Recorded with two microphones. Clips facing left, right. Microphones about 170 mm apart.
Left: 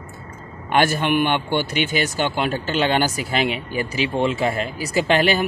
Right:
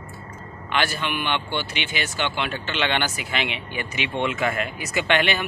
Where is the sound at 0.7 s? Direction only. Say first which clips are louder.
Left 7 dB; 45° left (ahead or behind).